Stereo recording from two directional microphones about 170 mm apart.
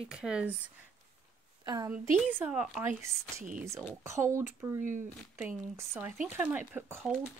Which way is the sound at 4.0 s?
15° right (ahead or behind).